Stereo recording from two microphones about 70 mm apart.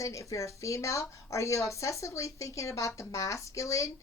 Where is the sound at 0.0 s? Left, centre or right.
Left.